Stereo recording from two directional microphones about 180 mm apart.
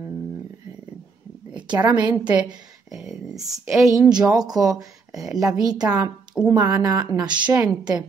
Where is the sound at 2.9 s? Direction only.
Centre (ahead or behind).